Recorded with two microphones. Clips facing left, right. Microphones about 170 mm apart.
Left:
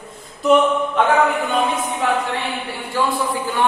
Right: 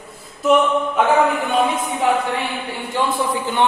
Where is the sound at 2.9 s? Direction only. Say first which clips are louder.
Left 1 dB; 20° right (ahead or behind).